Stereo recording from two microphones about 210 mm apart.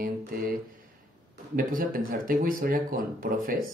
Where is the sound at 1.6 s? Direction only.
40° right (ahead or behind).